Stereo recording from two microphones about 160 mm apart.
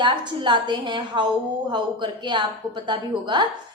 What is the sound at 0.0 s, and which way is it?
A woman's voice, 30° right (ahead or behind).